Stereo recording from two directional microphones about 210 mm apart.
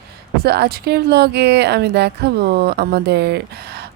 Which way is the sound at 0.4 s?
50° right (ahead or behind).